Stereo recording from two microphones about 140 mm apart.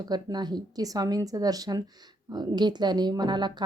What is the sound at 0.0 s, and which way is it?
A woman's voice, 30° right (ahead or behind).